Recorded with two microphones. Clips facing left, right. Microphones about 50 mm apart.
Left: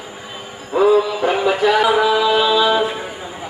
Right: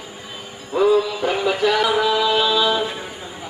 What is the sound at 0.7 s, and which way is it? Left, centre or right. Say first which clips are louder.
Music: left 3 dB; centre.